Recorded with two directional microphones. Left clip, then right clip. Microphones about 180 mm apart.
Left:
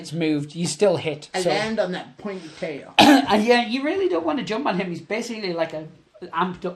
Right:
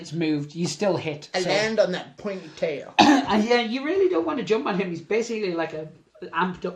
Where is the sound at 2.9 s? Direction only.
30° left (ahead or behind); by 5.7 s 50° left (ahead or behind).